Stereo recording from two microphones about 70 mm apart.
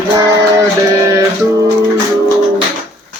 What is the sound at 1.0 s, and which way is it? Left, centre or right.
Music, right.